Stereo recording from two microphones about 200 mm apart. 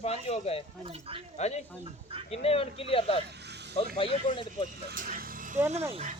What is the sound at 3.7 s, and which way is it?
Speech, 30° left (ahead or behind).